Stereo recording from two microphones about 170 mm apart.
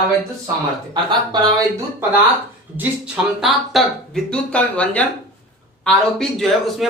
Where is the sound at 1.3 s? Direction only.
25° right (ahead or behind).